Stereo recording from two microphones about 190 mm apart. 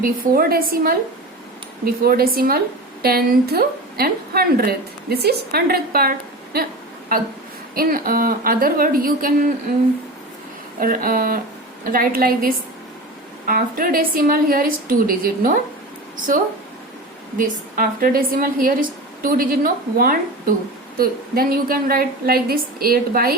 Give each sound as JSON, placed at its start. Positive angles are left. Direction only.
{"t": 0.0, "sound": "a woman's voice", "side_deg": -50}
{"t": 10.8, "sound": "a woman's voice", "side_deg": -45}
{"t": 17.3, "sound": "a woman's voice", "side_deg": -45}